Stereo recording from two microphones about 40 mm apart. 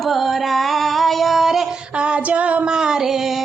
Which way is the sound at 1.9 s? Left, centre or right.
Right.